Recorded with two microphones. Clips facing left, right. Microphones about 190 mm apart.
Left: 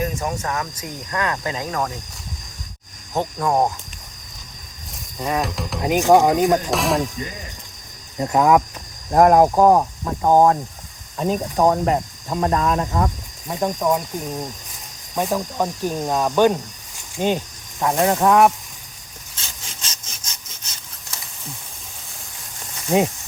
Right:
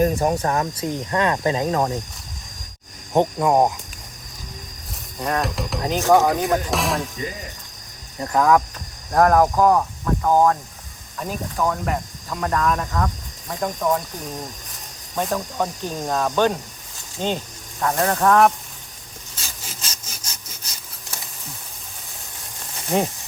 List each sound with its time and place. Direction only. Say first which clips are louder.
0.0 s speech: right 6 dB; 35° right (ahead or behind)
3.3 s speech: left 1 dB; 10° right (ahead or behind)
5.2 s speech: even; centre (ahead or behind)
5.8 s speech: left 2 dB; 15° left (ahead or behind)
6.7 s speech: left 3 dB; centre (ahead or behind)
8.2 s speech: left 2 dB; 20° left (ahead or behind)
11.5 s speech: left 6 dB; 40° left (ahead or behind)
11.9 s speech: left 5 dB; 25° left (ahead or behind)
15.1 s speech: left 2 dB; 10° left (ahead or behind)
19.4 s sawing: right 1 dB; 10° right (ahead or behind)